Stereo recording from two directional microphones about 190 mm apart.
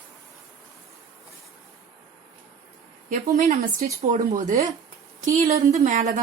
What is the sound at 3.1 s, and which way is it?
Speech, 40° right (ahead or behind).